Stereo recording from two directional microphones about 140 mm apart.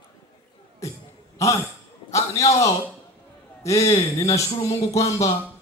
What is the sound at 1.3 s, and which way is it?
Speech, 25° left (ahead or behind).